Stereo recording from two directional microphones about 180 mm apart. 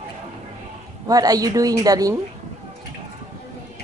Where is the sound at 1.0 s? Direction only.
20° right (ahead or behind).